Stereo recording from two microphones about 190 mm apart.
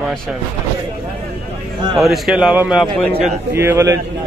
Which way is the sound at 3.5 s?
15° right (ahead or behind).